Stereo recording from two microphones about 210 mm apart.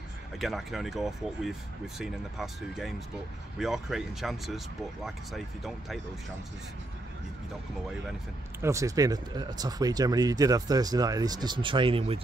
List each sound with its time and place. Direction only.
0.4 s speech: centre (ahead or behind)
8.5 s speech: 15° right (ahead or behind)